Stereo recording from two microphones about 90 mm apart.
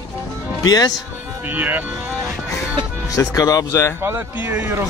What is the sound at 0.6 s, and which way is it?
Speech, 45° left (ahead or behind).